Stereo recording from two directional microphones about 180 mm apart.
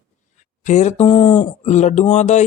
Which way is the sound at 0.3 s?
40° left (ahead or behind).